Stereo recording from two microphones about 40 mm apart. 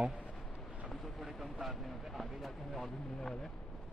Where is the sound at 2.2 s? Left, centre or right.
Centre.